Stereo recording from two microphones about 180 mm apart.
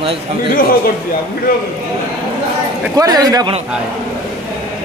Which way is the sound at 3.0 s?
20° right (ahead or behind).